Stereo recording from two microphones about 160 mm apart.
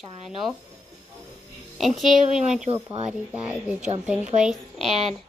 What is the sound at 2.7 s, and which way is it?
Speech, 35° right (ahead or behind).